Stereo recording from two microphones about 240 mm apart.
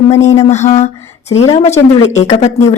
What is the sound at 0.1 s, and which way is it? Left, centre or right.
A woman's voice, left.